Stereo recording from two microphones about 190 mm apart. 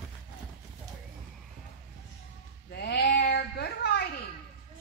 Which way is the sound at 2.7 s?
60° left (ahead or behind).